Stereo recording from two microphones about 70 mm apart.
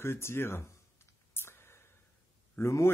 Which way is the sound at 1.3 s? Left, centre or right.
Left.